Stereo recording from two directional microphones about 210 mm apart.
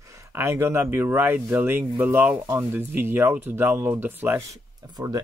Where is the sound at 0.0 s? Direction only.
15° right (ahead or behind).